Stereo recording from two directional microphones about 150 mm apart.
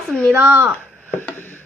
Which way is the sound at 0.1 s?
5° left (ahead or behind).